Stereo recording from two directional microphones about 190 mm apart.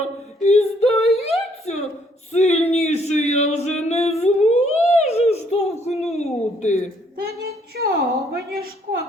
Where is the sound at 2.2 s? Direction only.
35° left (ahead or behind).